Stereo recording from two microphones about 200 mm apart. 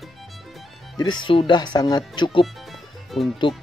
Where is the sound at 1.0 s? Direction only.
20° left (ahead or behind).